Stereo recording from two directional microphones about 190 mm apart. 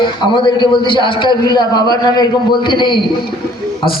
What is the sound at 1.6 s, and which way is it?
Speech, 20° left (ahead or behind).